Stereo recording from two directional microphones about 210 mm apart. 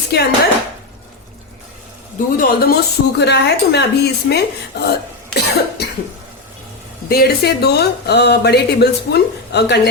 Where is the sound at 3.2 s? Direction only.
55° left (ahead or behind).